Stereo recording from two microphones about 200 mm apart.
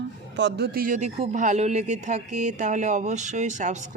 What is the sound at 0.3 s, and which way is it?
Speech, 60° right (ahead or behind).